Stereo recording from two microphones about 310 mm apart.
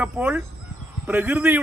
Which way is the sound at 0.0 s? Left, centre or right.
Centre.